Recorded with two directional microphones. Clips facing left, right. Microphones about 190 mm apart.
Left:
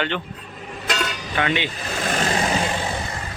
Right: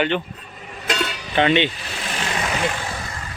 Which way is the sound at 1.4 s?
25° right (ahead or behind).